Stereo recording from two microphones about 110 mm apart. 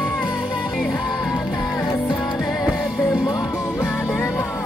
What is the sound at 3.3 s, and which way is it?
Music, 35° left (ahead or behind).